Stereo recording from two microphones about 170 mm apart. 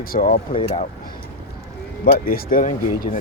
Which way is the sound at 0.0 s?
55° left (ahead or behind).